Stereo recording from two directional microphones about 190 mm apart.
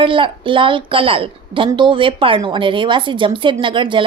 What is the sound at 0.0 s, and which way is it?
A woman's voice, 25° right (ahead or behind).